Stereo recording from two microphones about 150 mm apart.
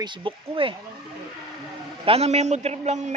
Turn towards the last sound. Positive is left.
turn(degrees=-45)  # may be behind; listen again after turning